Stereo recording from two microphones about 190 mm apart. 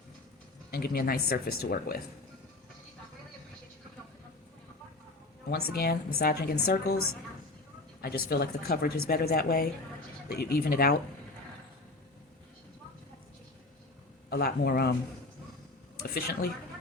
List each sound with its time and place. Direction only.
0.7 s speech: 50° left (ahead or behind)
5.5 s a woman's voice: 55° left (ahead or behind)
14.3 s a woman's voice: 55° left (ahead or behind)
16.0 s a woman's voice: 55° left (ahead or behind)